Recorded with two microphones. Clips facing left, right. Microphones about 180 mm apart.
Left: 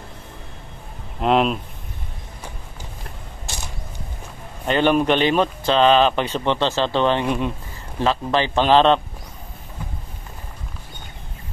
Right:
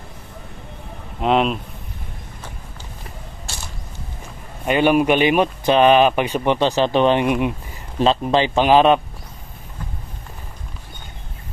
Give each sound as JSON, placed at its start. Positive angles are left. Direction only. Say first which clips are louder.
{"t": 1.2, "sound": "speech", "louder": "even", "side_deg": 0}
{"t": 3.5, "sound": "creak", "louder": "left 2 dB", "side_deg": 20}
{"t": 4.6, "sound": "speech", "louder": "right 2 dB", "side_deg": -10}